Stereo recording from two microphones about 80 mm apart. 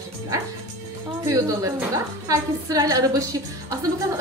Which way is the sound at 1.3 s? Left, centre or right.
Right.